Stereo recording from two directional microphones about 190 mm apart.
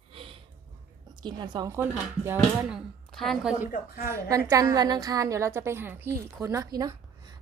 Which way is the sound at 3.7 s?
50° left (ahead or behind).